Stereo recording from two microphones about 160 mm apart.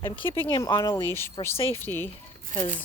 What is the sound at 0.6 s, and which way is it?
Speech, 15° left (ahead or behind).